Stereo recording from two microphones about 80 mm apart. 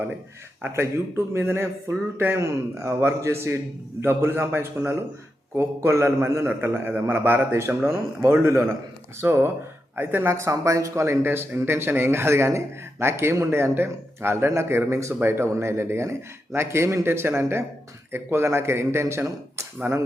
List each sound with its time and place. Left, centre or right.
0.6 s a man's voice: right
10.3 s speech: right
19.9 s a man's voice: right